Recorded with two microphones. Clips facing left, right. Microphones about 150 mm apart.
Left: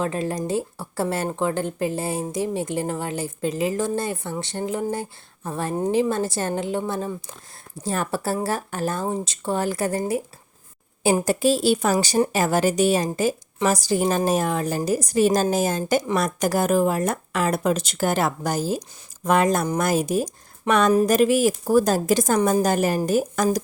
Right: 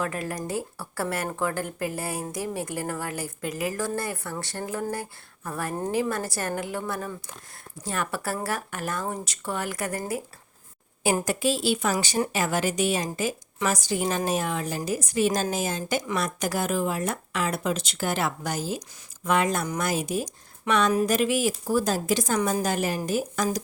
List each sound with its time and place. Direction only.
0.0 s a woman's voice: 25° left (ahead or behind); by 23.6 s 45° left (ahead or behind)